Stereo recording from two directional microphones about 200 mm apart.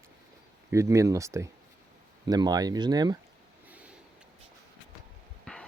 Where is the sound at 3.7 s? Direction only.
5° right (ahead or behind).